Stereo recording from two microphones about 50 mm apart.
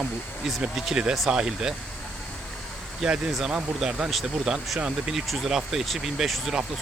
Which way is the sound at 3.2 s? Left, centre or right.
Centre.